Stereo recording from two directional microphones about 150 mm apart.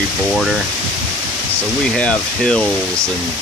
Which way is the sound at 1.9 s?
5° left (ahead or behind).